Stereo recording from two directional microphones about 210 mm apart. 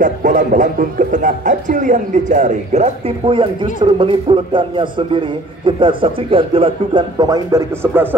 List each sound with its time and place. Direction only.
0.0 s speech: 40° right (ahead or behind); by 8.1 s 10° right (ahead or behind)